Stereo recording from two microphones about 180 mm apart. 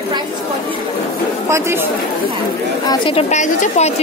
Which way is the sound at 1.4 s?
15° right (ahead or behind).